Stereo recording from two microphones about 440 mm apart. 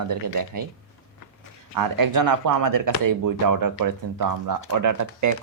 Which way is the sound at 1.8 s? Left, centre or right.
Right.